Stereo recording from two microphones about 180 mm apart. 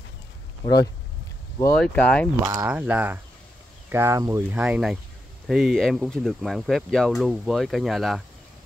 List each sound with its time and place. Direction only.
1.8 s speech: 5° left (ahead or behind)
2.4 s speech: 20° right (ahead or behind)
2.7 s speech: 5° right (ahead or behind)